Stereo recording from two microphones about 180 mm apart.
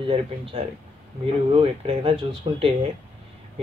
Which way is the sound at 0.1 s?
30° right (ahead or behind).